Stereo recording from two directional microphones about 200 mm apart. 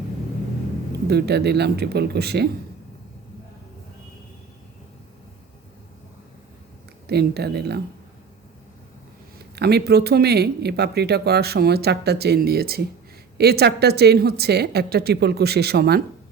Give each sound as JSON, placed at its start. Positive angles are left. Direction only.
{"t": 1.0, "sound": "speech", "side_deg": -55}
{"t": 7.1, "sound": "speech", "side_deg": -55}
{"t": 9.6, "sound": "speech", "side_deg": -55}